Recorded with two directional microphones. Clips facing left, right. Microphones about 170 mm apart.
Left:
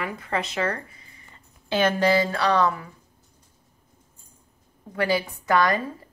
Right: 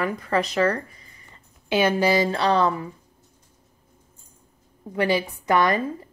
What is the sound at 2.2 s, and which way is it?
Speech, 25° right (ahead or behind).